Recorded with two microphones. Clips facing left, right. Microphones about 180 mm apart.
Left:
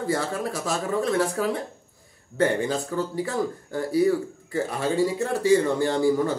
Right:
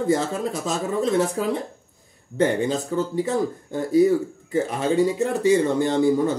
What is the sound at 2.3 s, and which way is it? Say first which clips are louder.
Speech: right 2 dB; 20° right (ahead or behind).